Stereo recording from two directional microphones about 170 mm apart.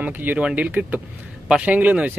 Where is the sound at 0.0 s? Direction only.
10° right (ahead or behind).